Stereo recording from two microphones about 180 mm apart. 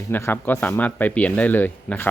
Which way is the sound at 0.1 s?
10° left (ahead or behind).